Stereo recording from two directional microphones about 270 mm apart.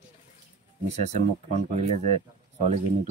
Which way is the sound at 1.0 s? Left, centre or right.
Right.